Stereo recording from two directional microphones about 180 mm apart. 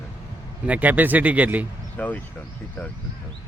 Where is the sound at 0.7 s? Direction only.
10° right (ahead or behind).